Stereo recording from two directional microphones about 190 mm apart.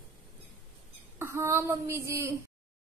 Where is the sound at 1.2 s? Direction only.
15° right (ahead or behind).